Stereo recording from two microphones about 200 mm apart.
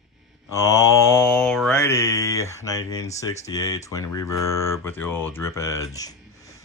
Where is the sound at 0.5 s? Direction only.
15° left (ahead or behind).